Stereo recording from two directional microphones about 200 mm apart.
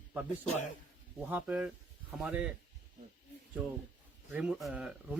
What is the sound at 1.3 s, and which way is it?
Speech, 5° right (ahead or behind).